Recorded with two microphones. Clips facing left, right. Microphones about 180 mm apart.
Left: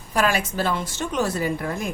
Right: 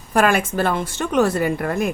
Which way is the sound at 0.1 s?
55° right (ahead or behind).